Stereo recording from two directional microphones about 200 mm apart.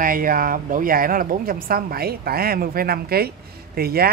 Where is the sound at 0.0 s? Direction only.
45° right (ahead or behind).